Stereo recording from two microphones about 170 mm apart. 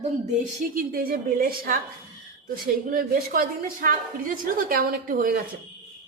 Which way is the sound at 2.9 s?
60° right (ahead or behind).